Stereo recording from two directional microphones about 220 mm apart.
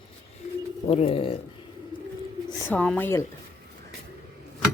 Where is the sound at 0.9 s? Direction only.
25° left (ahead or behind).